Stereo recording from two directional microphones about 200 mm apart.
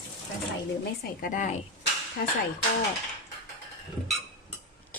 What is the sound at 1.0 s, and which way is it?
Speech, 40° left (ahead or behind).